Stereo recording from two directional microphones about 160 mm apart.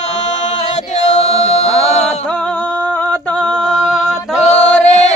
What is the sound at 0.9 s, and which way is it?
Music, 45° left (ahead or behind).